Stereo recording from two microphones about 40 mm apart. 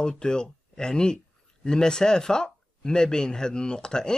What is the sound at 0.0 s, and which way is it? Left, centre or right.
A man's voice, centre.